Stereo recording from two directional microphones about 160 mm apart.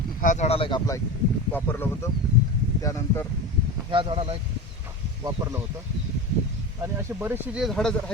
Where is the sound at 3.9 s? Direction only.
35° right (ahead or behind).